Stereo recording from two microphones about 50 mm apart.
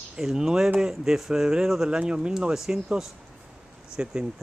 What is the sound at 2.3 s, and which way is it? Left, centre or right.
A man's voice, centre.